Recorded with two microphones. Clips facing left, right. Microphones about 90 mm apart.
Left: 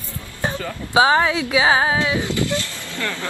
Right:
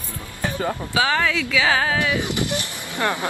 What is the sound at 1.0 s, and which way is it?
Speech, 20° left (ahead or behind).